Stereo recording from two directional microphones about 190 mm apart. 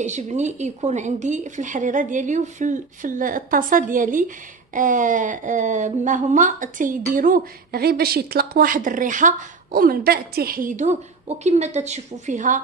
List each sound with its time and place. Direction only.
0.0 s speech: 40° right (ahead or behind)